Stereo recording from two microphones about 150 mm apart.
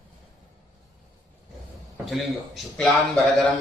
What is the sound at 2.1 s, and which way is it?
Speech, centre (ahead or behind).